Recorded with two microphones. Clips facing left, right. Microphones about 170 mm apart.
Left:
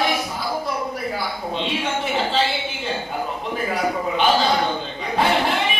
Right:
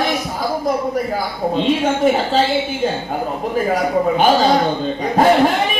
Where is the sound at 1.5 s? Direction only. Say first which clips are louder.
Right 9 dB; 45° right (ahead or behind).